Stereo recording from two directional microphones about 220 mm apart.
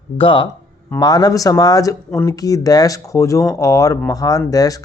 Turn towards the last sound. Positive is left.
turn(degrees=15)  # may be behind; listen again after turning